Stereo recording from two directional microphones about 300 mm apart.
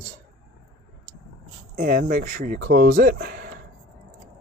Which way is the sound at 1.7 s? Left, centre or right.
Right.